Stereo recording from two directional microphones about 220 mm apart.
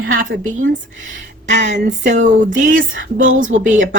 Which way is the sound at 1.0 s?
55° right (ahead or behind).